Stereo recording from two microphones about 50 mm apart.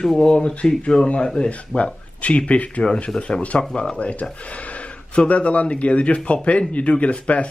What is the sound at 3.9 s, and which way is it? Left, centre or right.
Speech, left.